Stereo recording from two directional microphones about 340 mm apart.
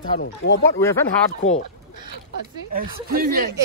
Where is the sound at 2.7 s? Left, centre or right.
Right.